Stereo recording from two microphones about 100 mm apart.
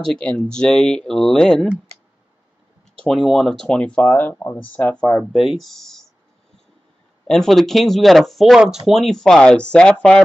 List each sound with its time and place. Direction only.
0.0 s speech: 5° left (ahead or behind)
3.0 s speech: centre (ahead or behind)
5.2 s speech: 5° right (ahead or behind)
7.2 s speech: 5° left (ahead or behind)